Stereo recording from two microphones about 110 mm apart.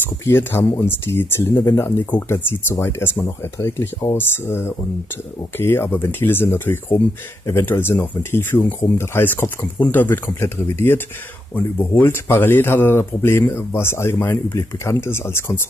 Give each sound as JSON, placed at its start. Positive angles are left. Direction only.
{"t": 0.2, "sound": "speech", "side_deg": 20}